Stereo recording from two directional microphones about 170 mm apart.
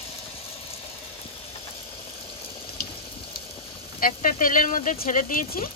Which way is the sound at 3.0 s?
30° left (ahead or behind).